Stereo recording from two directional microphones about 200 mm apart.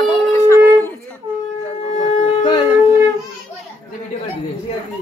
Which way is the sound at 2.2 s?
20° left (ahead or behind).